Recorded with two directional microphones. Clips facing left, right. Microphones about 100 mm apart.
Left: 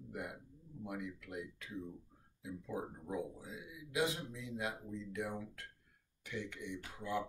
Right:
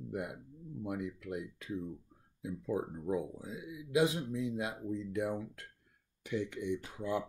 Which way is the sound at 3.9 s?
15° right (ahead or behind).